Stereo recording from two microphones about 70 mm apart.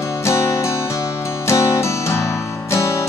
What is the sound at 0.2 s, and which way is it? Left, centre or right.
Music, left.